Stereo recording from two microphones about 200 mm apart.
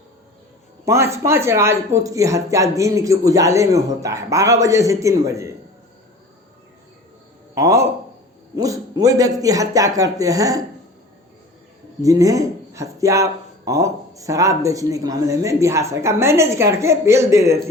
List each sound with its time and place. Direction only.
0.9 s speech: 15° right (ahead or behind)
7.5 s a man's voice: 15° right (ahead or behind)
12.0 s speech: 15° right (ahead or behind)